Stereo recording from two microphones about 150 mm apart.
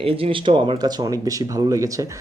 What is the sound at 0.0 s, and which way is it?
Speech, 35° right (ahead or behind).